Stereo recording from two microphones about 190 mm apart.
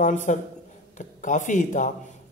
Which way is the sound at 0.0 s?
40° left (ahead or behind).